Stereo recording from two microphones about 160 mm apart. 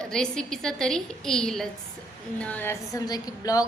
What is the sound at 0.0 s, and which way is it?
A woman's voice, 5° left (ahead or behind).